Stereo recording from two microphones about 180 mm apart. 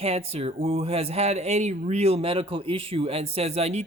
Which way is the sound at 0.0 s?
35° right (ahead or behind).